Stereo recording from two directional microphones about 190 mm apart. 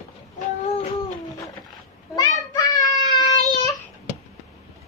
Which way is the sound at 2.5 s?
20° left (ahead or behind).